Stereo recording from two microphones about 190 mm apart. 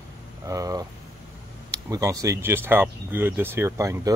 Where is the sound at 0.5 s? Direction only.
20° right (ahead or behind).